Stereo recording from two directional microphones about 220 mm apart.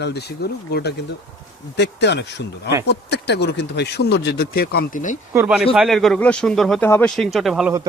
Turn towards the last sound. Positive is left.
turn(degrees=0)  # may be behind; listen again after turning